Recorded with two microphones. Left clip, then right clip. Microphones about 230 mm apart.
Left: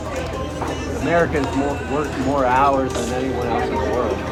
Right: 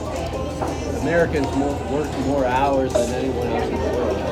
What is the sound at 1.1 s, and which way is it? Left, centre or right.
Speech, centre.